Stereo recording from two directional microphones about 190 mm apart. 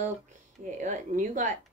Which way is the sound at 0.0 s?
40° right (ahead or behind).